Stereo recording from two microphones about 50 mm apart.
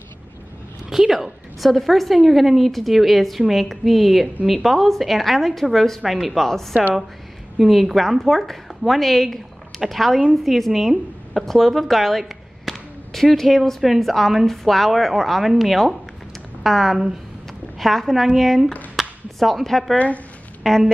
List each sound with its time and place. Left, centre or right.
0.8 s a woman's voice: centre
6.7 s a woman's voice: right
7.5 s a woman's voice: centre
18.9 s a sound: centre
20.6 s speech: centre